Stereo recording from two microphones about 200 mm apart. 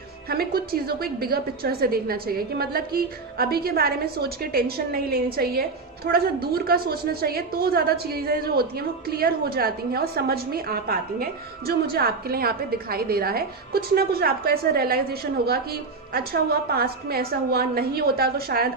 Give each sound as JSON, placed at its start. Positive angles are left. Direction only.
{"t": 0.3, "sound": "a woman's voice", "side_deg": -50}